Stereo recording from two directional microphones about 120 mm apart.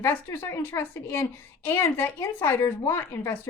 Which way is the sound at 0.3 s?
25° left (ahead or behind).